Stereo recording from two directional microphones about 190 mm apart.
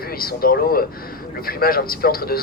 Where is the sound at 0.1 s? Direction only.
50° left (ahead or behind).